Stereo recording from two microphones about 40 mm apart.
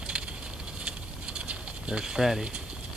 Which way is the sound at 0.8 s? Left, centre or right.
Right.